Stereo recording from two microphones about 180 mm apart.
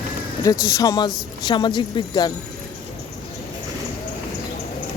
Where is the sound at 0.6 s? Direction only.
20° left (ahead or behind).